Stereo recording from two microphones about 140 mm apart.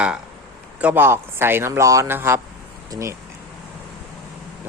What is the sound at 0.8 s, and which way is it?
Speech, 10° right (ahead or behind).